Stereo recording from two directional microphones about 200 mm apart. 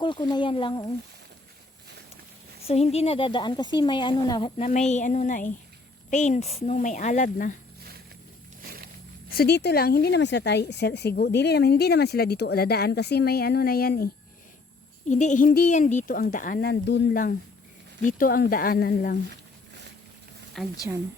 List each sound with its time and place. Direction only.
0.0 s speech: 25° left (ahead or behind)
2.6 s speech: 30° left (ahead or behind)
8.6 s wild animals: 50° right (ahead or behind)
9.3 s speech: 55° left (ahead or behind)
15.1 s speech: 35° left (ahead or behind); by 17.2 s 60° left (ahead or behind)
18.0 s speech: 45° left (ahead or behind)
20.6 s speech: centre (ahead or behind)